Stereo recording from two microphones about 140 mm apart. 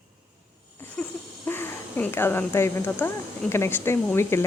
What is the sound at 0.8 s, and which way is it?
Speech, 10° left (ahead or behind).